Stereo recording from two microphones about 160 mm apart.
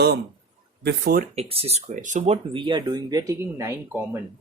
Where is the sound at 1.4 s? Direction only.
40° right (ahead or behind).